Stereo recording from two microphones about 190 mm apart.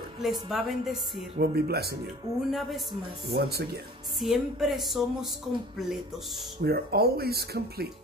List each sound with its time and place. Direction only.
0.2 s speech: centre (ahead or behind)
1.4 s speech: 55° right (ahead or behind)
2.5 s speech: centre (ahead or behind)
3.3 s speech: 55° right (ahead or behind)
4.2 s speech: centre (ahead or behind)
6.6 s speech: 55° right (ahead or behind)